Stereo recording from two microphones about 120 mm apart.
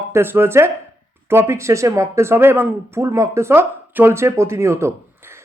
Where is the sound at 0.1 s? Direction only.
20° right (ahead or behind).